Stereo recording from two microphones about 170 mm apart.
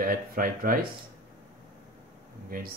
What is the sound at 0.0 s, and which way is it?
Speech, 55° right (ahead or behind).